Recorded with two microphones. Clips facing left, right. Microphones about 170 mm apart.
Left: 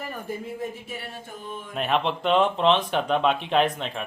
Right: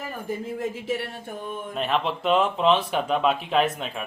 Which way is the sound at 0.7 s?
90° right.